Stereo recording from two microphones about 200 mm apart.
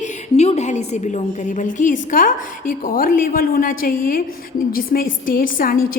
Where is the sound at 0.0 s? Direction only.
35° left (ahead or behind).